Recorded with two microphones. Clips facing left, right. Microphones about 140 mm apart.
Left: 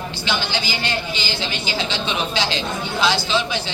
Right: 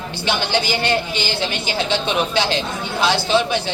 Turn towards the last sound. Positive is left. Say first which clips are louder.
# right 4 dB
turn(degrees=-55)  # may be behind; listen again after turning